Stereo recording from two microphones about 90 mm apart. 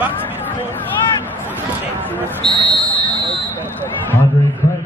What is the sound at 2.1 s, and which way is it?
Speech, 20° right (ahead or behind).